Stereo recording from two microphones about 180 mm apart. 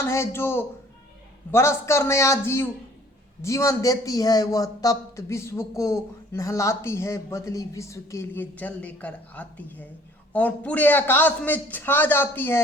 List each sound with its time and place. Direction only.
0.0 s a man's voice: 15° left (ahead or behind)